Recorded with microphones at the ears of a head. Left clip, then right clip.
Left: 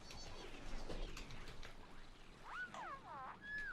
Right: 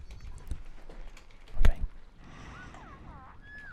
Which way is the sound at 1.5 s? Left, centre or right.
Right.